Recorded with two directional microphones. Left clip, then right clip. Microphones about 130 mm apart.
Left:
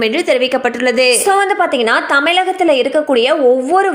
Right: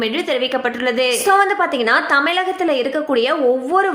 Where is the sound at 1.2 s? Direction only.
30° left (ahead or behind).